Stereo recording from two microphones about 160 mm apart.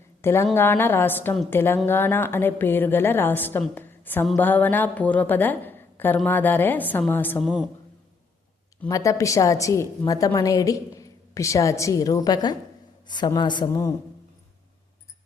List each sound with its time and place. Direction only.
0.2 s a woman's voice: 15° left (ahead or behind)
3.8 s a sound: 10° left (ahead or behind)
4.4 s a woman's voice: 10° left (ahead or behind)
7.4 s a woman's voice: 5° right (ahead or behind)
8.9 s a woman's voice: 20° left (ahead or behind)